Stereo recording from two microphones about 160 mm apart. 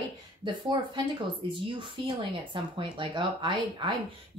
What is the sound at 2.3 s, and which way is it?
A woman's voice, 30° right (ahead or behind).